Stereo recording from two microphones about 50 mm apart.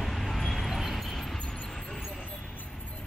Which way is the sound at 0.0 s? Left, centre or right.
Centre.